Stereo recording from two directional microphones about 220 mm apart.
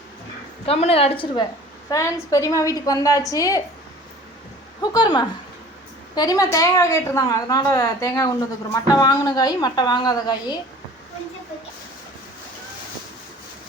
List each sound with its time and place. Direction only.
0.6 s a woman's voice: 25° left (ahead or behind)
4.8 s a woman's voice: 20° left (ahead or behind)